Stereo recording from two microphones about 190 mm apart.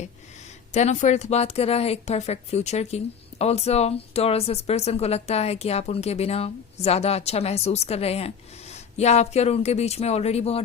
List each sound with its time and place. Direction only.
0.7 s speech: 35° left (ahead or behind)